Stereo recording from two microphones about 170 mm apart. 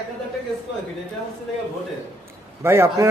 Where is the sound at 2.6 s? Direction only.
15° right (ahead or behind).